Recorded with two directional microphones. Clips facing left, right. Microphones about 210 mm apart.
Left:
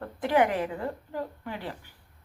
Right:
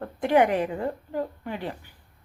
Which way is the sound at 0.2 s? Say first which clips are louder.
Right 3 dB; 20° right (ahead or behind).